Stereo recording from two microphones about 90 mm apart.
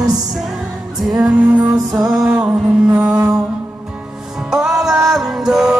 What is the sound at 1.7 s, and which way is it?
Music, 45° right (ahead or behind).